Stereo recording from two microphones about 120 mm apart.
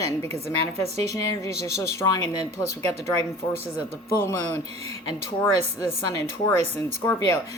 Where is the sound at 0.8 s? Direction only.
65° right (ahead or behind).